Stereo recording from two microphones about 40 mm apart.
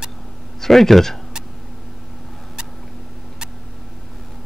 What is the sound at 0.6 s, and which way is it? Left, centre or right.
Speech, centre.